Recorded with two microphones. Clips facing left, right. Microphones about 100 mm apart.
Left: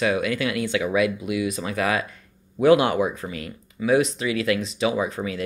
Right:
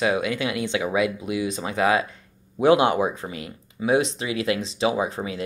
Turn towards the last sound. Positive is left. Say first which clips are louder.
# even
turn(degrees=-25)  # may be behind; listen again after turning